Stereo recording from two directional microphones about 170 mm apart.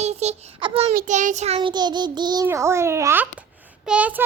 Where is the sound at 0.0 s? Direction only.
40° right (ahead or behind).